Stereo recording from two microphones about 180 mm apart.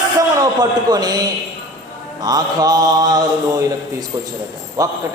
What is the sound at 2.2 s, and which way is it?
A man's voice, 20° right (ahead or behind).